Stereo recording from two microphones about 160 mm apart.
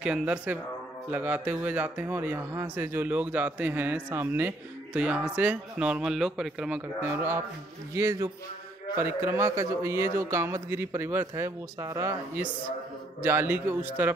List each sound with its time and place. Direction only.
0.0 s speech: 5° right (ahead or behind)
7.0 s speech: 15° right (ahead or behind)